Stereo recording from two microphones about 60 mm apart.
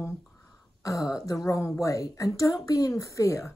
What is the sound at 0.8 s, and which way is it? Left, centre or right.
Throat clearing, left.